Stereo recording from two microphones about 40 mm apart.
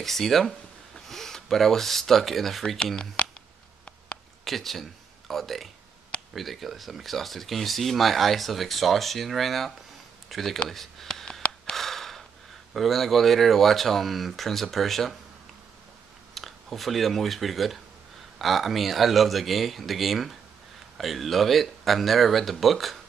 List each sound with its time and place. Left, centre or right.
0.0 s speech: centre
3.2 s a sound: left
4.5 s speech: centre
11.7 s gasp: centre
12.7 s speech: centre
16.3 s speech: centre